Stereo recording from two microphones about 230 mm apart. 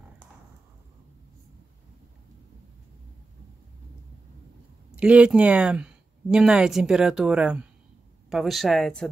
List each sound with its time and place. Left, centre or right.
4.9 s speech: centre